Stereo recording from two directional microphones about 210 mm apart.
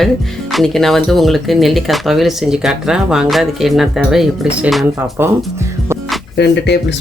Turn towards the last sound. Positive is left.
turn(degrees=55)  # may be behind; listen again after turning